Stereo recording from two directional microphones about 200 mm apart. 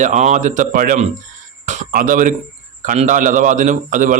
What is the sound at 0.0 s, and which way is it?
A man's voice, 35° right (ahead or behind).